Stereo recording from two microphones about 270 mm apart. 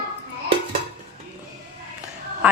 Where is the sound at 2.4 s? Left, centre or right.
Centre.